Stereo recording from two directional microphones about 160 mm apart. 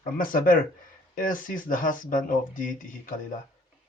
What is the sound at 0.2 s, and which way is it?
Speech, 60° left (ahead or behind).